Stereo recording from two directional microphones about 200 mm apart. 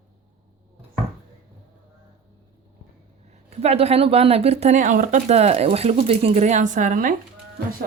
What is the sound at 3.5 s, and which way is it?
Speech, 30° right (ahead or behind).